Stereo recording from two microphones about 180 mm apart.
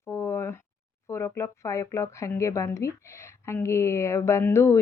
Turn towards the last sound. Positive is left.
turn(degrees=15)  # may be behind; listen again after turning